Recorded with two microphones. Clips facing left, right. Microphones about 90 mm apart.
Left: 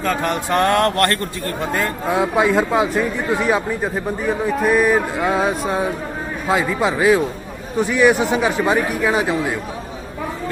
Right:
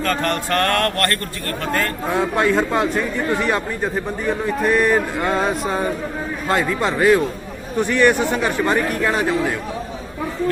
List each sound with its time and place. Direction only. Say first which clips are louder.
0.0 s speech: left 1 dB; 10° left (ahead or behind)